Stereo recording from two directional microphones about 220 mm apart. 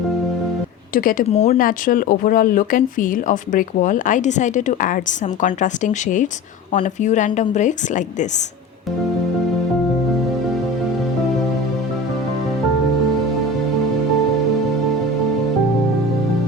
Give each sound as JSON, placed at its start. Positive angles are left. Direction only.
{"t": 0.9, "sound": "speech", "side_deg": 40}
{"t": 1.3, "sound": "speech", "side_deg": 30}